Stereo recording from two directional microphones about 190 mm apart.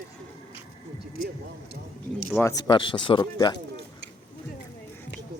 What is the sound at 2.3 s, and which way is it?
Speech, 15° left (ahead or behind).